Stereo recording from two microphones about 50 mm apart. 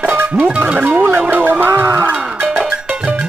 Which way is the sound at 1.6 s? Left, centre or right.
Right.